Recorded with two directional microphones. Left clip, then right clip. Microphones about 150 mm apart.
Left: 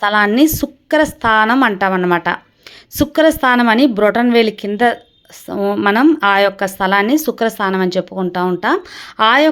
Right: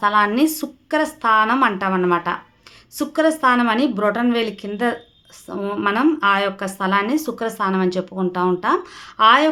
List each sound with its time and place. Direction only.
0.0 s a woman's voice: 50° left (ahead or behind)